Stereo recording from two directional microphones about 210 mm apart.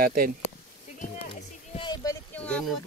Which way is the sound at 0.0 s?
45° right (ahead or behind).